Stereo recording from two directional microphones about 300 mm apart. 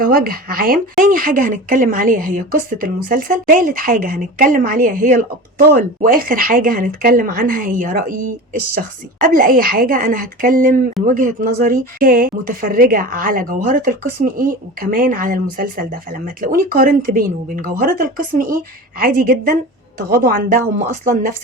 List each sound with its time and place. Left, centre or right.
0.0 s speech: right